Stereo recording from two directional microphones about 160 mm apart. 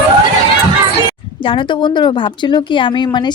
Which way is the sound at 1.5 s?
30° left (ahead or behind).